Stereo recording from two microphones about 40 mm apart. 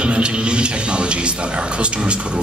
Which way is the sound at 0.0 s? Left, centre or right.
Right.